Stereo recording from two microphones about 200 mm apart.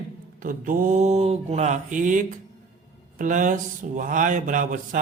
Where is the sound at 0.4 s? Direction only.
40° right (ahead or behind).